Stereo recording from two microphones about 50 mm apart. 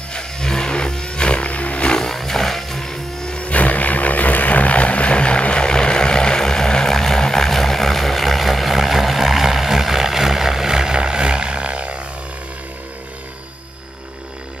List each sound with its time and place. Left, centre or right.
0.1 s a sound: centre
1.9 s music: centre
3.3 s vehicle: left; by 12.0 s right